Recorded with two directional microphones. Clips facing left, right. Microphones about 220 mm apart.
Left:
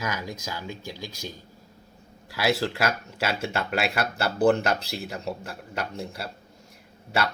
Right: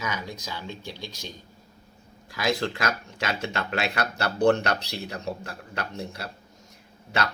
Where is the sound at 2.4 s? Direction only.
5° left (ahead or behind).